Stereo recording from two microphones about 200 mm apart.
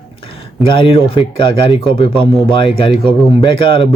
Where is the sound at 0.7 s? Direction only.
25° left (ahead or behind).